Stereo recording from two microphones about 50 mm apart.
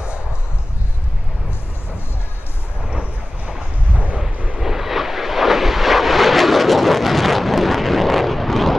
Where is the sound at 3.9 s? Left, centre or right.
Right.